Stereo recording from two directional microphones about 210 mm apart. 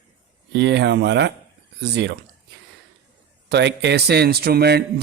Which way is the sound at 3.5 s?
55° right (ahead or behind).